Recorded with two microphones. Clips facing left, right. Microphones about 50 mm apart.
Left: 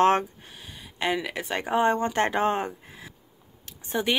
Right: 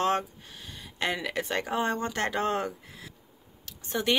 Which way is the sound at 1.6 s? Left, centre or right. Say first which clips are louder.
Left 10 dB; centre.